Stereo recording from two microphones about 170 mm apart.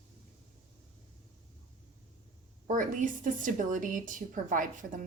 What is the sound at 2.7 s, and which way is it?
Speech, 50° right (ahead or behind).